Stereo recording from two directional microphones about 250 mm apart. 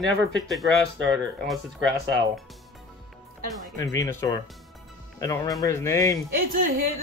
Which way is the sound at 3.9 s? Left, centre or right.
Centre.